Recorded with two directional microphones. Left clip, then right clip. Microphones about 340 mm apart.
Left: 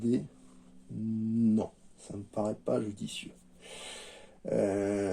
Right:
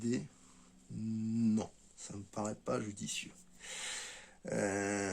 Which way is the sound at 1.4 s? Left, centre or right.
Right.